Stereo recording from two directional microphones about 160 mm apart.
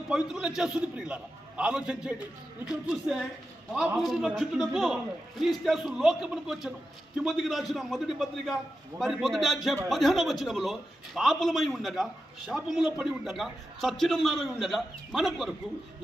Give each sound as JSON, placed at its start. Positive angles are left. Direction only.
{"t": 0.1, "sound": "a man's voice", "side_deg": -5}